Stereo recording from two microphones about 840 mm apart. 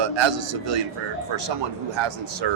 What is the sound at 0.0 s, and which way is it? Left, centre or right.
Speech, right.